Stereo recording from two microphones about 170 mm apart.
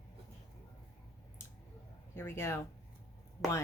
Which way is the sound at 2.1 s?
15° left (ahead or behind).